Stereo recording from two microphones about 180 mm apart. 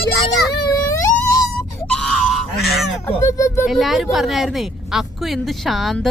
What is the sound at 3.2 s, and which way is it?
Speech, 15° left (ahead or behind).